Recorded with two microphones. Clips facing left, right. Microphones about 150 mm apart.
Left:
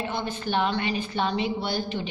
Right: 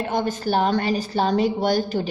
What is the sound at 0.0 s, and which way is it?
A woman's voice, 45° right (ahead or behind).